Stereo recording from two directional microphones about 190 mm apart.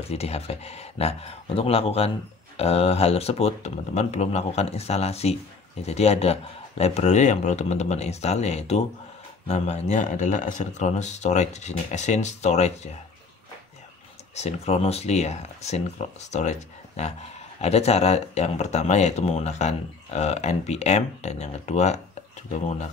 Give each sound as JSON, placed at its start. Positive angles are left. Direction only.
{"t": 0.1, "sound": "speech", "side_deg": 35}
{"t": 14.3, "sound": "speech", "side_deg": 35}